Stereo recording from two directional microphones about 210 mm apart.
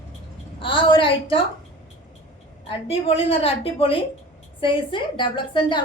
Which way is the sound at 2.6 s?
25° left (ahead or behind).